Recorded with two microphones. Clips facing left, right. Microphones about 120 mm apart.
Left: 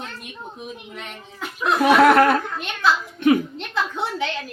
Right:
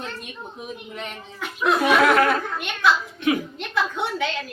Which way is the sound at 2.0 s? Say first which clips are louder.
Left 4 dB; 45° left (ahead or behind).